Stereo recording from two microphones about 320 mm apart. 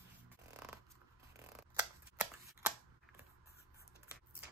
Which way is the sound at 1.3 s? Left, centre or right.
Centre.